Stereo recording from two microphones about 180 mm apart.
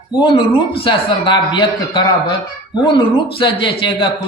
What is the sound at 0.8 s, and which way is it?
Speech, 25° left (ahead or behind).